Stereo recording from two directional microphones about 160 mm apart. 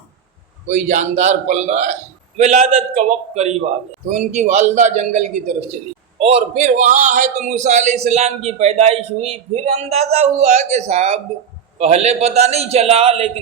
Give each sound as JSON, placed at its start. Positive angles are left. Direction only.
{"t": 0.7, "sound": "a man's voice", "side_deg": -45}